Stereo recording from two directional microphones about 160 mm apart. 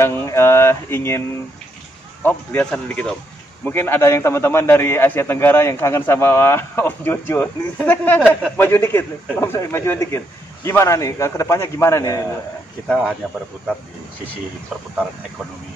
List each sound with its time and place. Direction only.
0.0 s a man's voice: 15° left (ahead or behind)
2.2 s a man's voice: 10° left (ahead or behind)
12.8 s speech: centre (ahead or behind)